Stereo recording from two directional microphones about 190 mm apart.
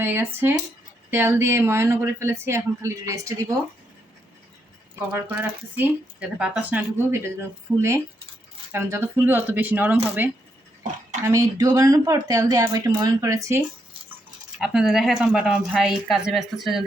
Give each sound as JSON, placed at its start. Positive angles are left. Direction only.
{"t": 0.0, "sound": "speech", "side_deg": -10}
{"t": 4.9, "sound": "speech", "side_deg": -10}
{"t": 8.7, "sound": "speech", "side_deg": -15}
{"t": 14.6, "sound": "a woman's voice", "side_deg": -5}